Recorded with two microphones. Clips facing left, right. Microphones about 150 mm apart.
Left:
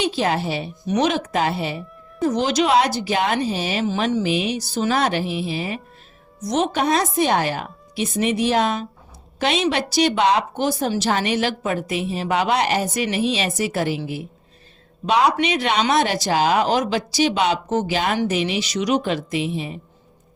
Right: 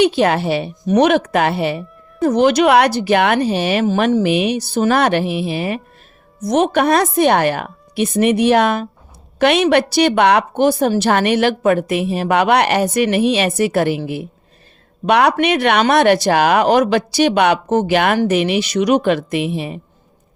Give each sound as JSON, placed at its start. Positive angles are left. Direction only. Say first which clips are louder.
{"t": 0.0, "sound": "a woman's voice", "louder": "right 7 dB", "side_deg": -65}